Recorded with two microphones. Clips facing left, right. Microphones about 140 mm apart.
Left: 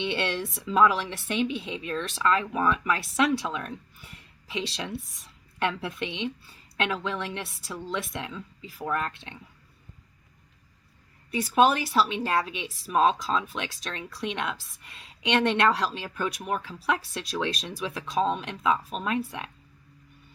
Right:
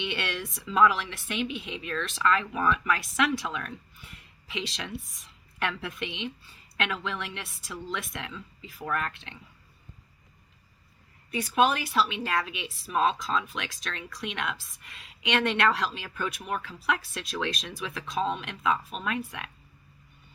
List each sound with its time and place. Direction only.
0.0 s a woman's voice: 30° left (ahead or behind)
11.3 s a woman's voice: 35° left (ahead or behind)